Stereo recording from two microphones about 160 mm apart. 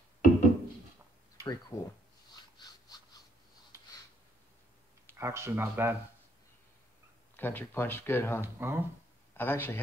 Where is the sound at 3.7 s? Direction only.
20° right (ahead or behind).